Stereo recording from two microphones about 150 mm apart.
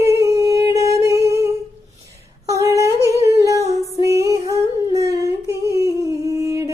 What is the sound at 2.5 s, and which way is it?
Humming, 20° right (ahead or behind).